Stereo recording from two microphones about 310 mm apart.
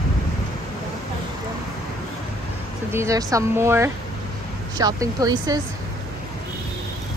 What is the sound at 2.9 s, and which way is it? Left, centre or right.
Speech, centre.